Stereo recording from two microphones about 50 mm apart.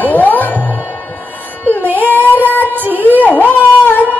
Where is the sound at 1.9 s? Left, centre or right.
Right.